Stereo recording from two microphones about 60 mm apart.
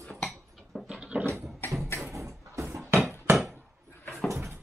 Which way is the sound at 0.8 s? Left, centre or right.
Centre.